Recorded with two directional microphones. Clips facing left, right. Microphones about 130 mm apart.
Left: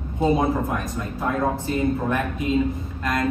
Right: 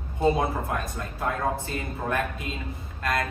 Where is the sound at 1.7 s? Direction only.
20° left (ahead or behind).